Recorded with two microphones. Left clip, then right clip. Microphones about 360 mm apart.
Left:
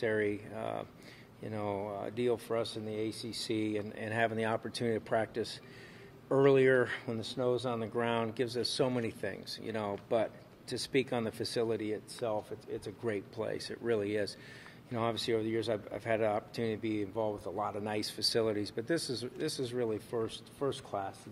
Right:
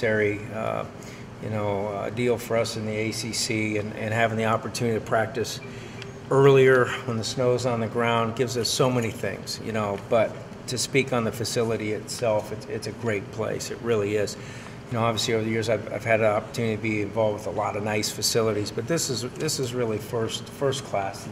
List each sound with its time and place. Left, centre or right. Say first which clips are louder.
0.0 s speech: right 9 dB; left